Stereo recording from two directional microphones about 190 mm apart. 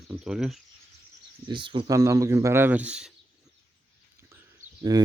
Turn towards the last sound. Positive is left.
turn(degrees=-20)  # may be behind; listen again after turning